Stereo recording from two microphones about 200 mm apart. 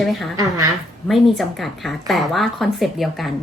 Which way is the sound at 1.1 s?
Centre (ahead or behind).